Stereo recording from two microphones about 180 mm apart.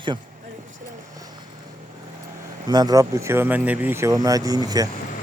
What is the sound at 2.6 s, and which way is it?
Speech, 20° right (ahead or behind).